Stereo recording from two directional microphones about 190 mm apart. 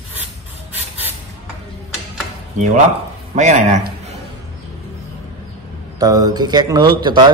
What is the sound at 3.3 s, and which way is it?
Speech, 40° right (ahead or behind).